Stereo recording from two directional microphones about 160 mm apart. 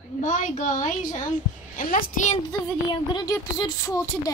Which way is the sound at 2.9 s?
25° left (ahead or behind).